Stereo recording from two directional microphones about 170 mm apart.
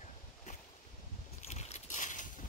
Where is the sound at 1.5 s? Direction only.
45° left (ahead or behind).